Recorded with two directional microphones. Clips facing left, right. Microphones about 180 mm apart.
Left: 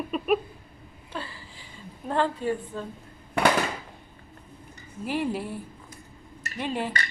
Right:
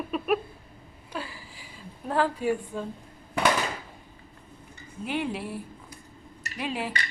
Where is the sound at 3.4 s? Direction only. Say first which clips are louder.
Left 2 dB; 60° left (ahead or behind).